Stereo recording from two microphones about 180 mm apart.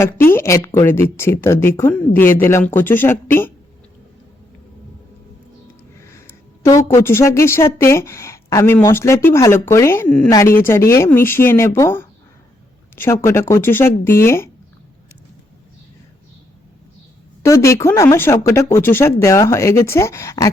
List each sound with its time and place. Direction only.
0.3 s a woman's voice: 15° left (ahead or behind)
6.0 s a woman's voice: 15° left (ahead or behind)
17.4 s a woman's voice: 15° left (ahead or behind)